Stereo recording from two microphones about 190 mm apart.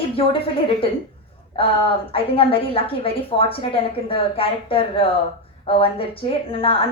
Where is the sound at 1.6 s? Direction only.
30° left (ahead or behind).